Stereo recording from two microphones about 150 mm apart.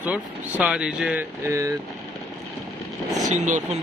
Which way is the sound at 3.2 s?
55° right (ahead or behind).